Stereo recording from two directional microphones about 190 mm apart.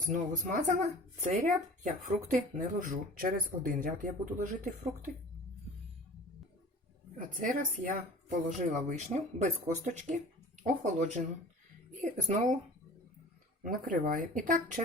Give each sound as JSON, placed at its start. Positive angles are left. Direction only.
{"t": 0.0, "sound": "speech", "side_deg": -40}
{"t": 7.2, "sound": "speech", "side_deg": -45}
{"t": 13.6, "sound": "speech", "side_deg": -45}